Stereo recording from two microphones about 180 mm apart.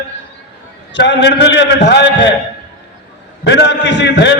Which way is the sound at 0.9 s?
75° left (ahead or behind).